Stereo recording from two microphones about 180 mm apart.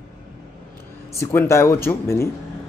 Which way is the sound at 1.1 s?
15° left (ahead or behind).